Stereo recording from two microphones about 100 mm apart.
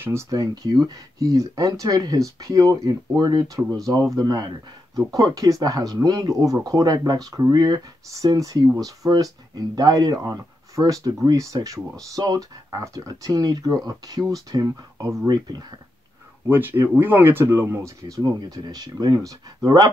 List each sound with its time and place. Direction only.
0.0 s speech: 30° right (ahead or behind); by 15.6 s 45° right (ahead or behind)
16.4 s speech: 20° right (ahead or behind); by 19.9 s 40° right (ahead or behind)